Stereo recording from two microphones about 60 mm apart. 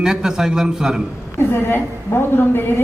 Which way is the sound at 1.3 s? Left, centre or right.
Left.